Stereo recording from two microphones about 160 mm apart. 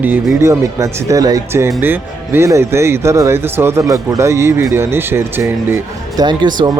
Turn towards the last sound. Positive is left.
turn(degrees=-25)  # may be behind; listen again after turning